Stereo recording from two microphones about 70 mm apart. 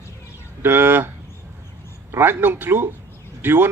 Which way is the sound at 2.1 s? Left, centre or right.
Right.